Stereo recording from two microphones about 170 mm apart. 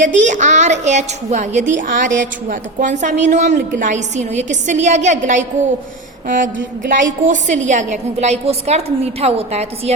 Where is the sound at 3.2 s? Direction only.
45° right (ahead or behind).